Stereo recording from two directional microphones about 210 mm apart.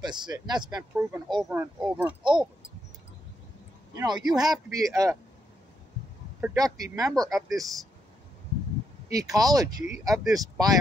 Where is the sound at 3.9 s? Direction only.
20° right (ahead or behind).